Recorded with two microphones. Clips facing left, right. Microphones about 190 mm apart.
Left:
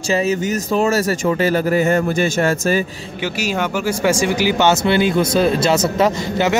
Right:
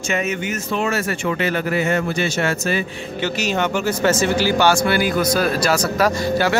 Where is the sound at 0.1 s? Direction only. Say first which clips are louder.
Left 5 dB; 35° left (ahead or behind).